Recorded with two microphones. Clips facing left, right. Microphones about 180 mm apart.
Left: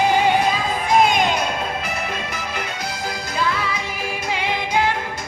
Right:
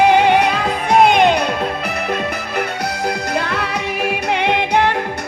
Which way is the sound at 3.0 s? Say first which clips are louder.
Right 2 dB; 65° right (ahead or behind).